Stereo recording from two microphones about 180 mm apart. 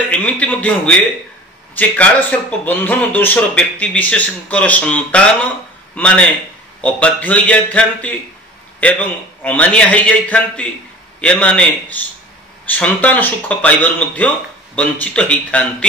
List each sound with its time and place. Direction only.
0.1 s speech: 5° left (ahead or behind)